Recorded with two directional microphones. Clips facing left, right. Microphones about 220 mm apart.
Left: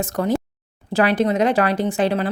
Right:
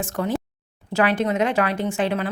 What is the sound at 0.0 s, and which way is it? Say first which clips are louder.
A woman's voice: left 4 dB; 40° left (ahead or behind).